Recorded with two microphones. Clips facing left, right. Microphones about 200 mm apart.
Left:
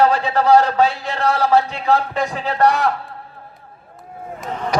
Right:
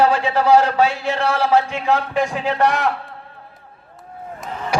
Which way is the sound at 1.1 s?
35° left (ahead or behind).